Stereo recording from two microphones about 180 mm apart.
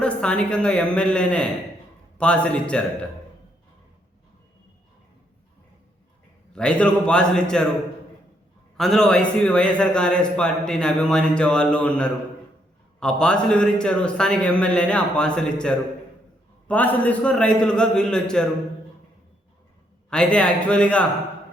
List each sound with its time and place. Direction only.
0.0 s a man's voice: 5° left (ahead or behind)
6.5 s speech: 5° left (ahead or behind)
8.8 s speech: 5° left (ahead or behind)
20.1 s a man's voice: 5° left (ahead or behind)